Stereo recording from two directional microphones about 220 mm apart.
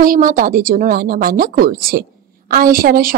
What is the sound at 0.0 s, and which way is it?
A woman's voice, 40° right (ahead or behind).